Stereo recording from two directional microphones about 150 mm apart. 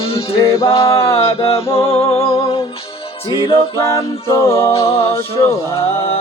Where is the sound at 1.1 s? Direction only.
40° left (ahead or behind).